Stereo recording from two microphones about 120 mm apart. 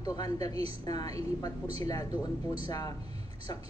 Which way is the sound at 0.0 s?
30° left (ahead or behind).